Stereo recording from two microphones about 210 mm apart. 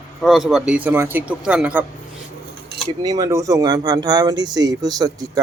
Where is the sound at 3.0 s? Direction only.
15° right (ahead or behind).